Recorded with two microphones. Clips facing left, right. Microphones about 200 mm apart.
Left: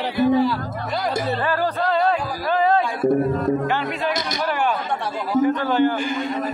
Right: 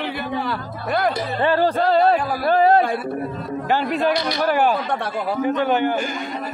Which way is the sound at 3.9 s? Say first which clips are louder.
Right 4 dB; 45° right (ahead or behind).